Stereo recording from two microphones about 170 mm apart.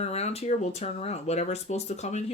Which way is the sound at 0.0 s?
40° left (ahead or behind).